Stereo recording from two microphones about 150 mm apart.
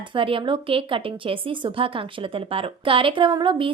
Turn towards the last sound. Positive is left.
turn(degrees=-35)  # may be behind; listen again after turning